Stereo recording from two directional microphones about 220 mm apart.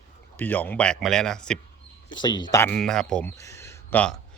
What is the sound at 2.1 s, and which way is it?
A man's voice, 20° left (ahead or behind).